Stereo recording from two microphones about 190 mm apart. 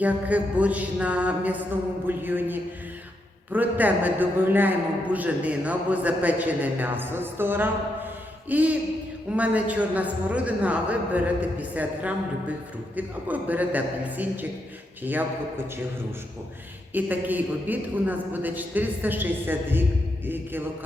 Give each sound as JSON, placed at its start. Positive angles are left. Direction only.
{"t": 0.0, "sound": "a woman's voice", "side_deg": -5}
{"t": 16.9, "sound": "a woman's voice", "side_deg": -10}